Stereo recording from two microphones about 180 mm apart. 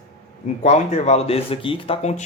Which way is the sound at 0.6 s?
40° left (ahead or behind).